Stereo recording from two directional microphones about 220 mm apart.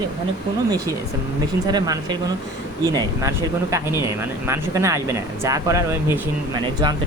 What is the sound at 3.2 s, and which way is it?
Speech, 15° right (ahead or behind).